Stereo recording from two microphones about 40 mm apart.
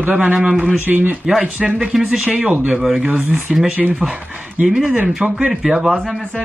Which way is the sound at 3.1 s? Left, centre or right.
Right.